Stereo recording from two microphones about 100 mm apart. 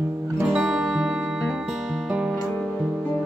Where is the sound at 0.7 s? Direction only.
15° right (ahead or behind).